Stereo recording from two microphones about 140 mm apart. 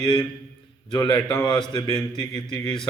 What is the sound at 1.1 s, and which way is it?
Speech, 10° left (ahead or behind).